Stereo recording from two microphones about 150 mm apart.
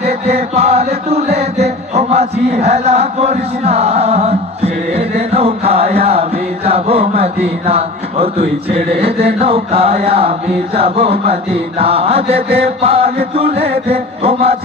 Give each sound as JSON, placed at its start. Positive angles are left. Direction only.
{"t": 0.0, "sound": "chant", "side_deg": -45}